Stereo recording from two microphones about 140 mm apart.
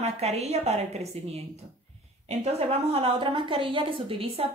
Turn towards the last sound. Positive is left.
turn(degrees=-40)  # may be behind; listen again after turning